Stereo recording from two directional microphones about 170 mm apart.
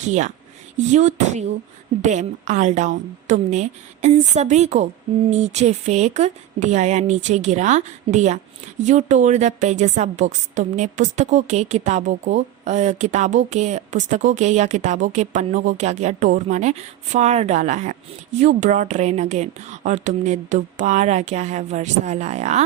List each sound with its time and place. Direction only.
0.0 s a woman's voice: 45° right (ahead or behind)